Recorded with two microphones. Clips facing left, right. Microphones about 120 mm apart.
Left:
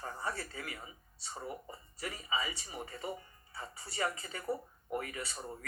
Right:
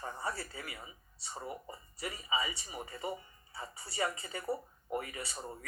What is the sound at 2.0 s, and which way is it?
Speech, 25° right (ahead or behind).